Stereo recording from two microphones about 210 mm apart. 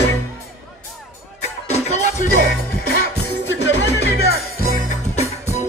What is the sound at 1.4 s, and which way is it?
Music, 30° left (ahead or behind).